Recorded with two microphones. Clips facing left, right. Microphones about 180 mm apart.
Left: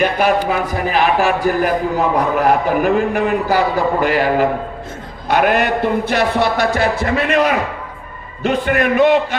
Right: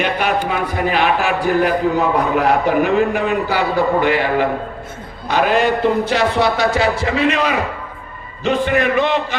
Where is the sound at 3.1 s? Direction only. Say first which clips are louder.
Left 2 dB; 45° left (ahead or behind).